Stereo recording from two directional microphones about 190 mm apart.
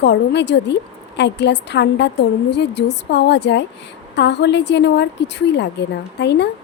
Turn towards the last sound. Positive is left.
turn(degrees=65)  # may be behind; listen again after turning